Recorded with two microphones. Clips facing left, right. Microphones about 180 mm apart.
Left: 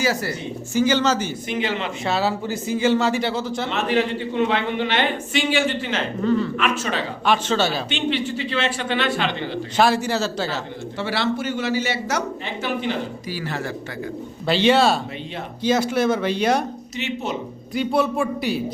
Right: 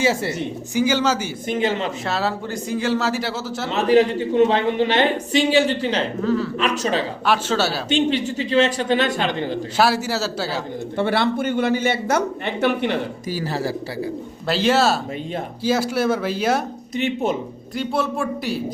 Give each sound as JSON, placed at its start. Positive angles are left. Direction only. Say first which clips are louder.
{"t": 0.0, "sound": "speech", "louder": "right 2 dB", "side_deg": -25}
{"t": 0.7, "sound": "a man's voice", "louder": "left 1 dB", "side_deg": -10}
{"t": 1.5, "sound": "a man's voice", "louder": "right 5 dB", "side_deg": -45}
{"t": 2.0, "sound": "speech", "louder": "left 5 dB", "side_deg": 0}
{"t": 3.7, "sound": "a man's voice", "louder": "right 7 dB", "side_deg": -35}
{"t": 6.2, "sound": "speech", "louder": "left 3 dB", "side_deg": 0}
{"t": 6.6, "sound": "a man's voice", "louder": "right 2 dB", "side_deg": -35}
{"t": 7.3, "sound": "a man's voice", "louder": "left 1 dB", "side_deg": -5}
{"t": 7.9, "sound": "a man's voice", "louder": "right 4 dB", "side_deg": -40}
{"t": 9.7, "sound": "a man's voice", "louder": "left 1 dB", "side_deg": -5}
{"t": 10.9, "sound": "a man's voice", "louder": "right 4 dB", "side_deg": -55}
{"t": 13.3, "sound": "a man's voice", "louder": "right 5 dB", "side_deg": -35}
{"t": 14.4, "sound": "speech", "louder": "left 1 dB", "side_deg": 0}
{"t": 17.7, "sound": "speech", "louder": "left 2 dB", "side_deg": 0}